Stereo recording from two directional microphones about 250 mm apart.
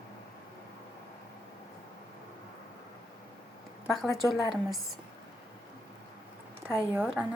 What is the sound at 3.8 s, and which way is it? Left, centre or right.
Speech, centre.